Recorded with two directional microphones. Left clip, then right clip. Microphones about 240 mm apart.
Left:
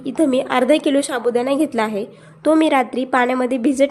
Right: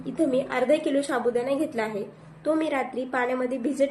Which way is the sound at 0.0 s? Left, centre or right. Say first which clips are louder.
Left 7 dB; left.